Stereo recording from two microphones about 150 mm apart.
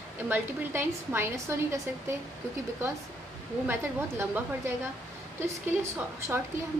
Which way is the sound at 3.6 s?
15° right (ahead or behind).